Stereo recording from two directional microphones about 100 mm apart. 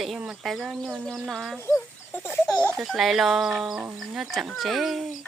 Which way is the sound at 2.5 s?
15° left (ahead or behind).